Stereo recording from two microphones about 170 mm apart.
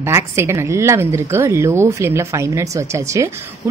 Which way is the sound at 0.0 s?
15° right (ahead or behind).